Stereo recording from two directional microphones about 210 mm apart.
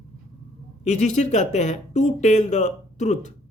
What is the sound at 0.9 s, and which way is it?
Speech, 35° left (ahead or behind).